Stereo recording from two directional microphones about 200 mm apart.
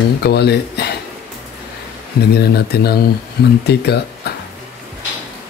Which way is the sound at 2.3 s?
50° left (ahead or behind).